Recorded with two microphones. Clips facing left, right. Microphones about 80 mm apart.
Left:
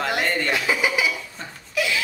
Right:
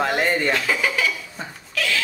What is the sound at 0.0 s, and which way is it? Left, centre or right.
Chuckle, centre.